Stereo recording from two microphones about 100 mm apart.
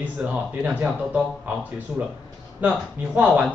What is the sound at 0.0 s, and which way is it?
A man's voice, 15° right (ahead or behind).